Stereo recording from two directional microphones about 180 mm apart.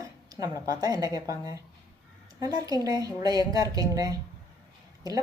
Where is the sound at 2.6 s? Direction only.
20° right (ahead or behind).